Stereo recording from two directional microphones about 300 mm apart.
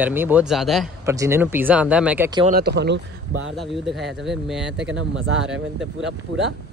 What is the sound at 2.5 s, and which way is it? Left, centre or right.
Speech, right.